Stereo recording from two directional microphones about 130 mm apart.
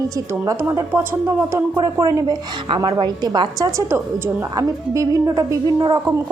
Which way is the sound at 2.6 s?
40° right (ahead or behind).